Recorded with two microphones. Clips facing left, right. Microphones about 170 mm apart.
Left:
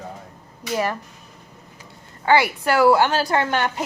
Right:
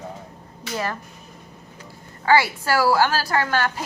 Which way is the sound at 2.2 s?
20° left (ahead or behind).